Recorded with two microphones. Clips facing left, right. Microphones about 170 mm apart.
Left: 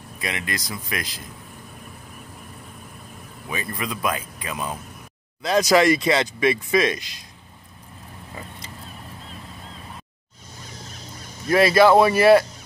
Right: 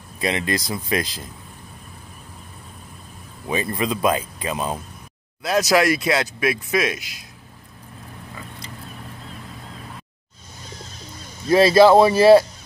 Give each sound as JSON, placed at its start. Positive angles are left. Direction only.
{"t": 0.2, "sound": "speech", "side_deg": -30}
{"t": 3.4, "sound": "speech", "side_deg": -25}
{"t": 5.4, "sound": "speech", "side_deg": -5}
{"t": 11.4, "sound": "speech", "side_deg": -25}